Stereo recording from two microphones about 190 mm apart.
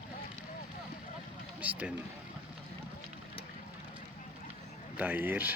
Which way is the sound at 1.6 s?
10° right (ahead or behind).